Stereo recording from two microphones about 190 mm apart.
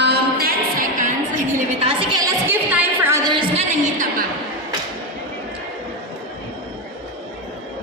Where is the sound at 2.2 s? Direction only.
15° right (ahead or behind).